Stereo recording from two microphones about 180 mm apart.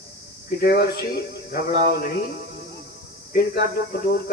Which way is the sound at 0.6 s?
60° left (ahead or behind).